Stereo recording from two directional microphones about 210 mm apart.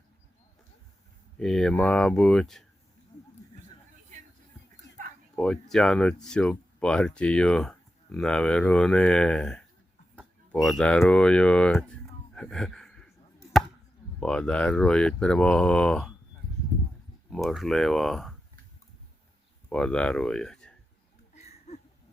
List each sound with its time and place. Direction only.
1.4 s speech: 5° left (ahead or behind)
5.4 s speech: centre (ahead or behind)
14.2 s speech: 5° left (ahead or behind)
17.2 s speech: centre (ahead or behind)
19.7 s speech: 5° left (ahead or behind)
21.3 s a sound: 30° left (ahead or behind)